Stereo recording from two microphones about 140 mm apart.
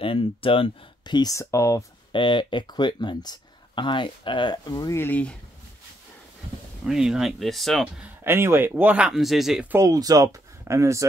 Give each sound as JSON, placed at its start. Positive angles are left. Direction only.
{"t": 0.0, "sound": "speech", "side_deg": 40}
{"t": 2.1, "sound": "speech", "side_deg": 35}
{"t": 4.9, "sound": "speech", "side_deg": 15}
{"t": 6.9, "sound": "speech", "side_deg": -5}
{"t": 8.2, "sound": "speech", "side_deg": -15}
{"t": 9.7, "sound": "speech", "side_deg": -20}